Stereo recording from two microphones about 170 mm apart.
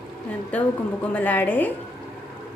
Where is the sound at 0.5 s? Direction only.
10° left (ahead or behind).